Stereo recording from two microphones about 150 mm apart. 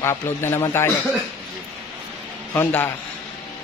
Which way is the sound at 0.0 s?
15° left (ahead or behind).